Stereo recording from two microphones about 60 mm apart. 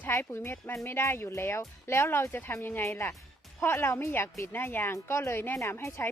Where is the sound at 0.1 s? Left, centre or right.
Left.